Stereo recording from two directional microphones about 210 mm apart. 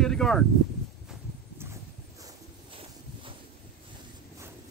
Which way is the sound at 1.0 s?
10° right (ahead or behind).